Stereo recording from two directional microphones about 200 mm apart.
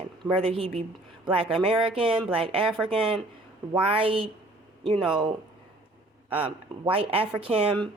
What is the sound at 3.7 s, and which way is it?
Speech, 25° right (ahead or behind).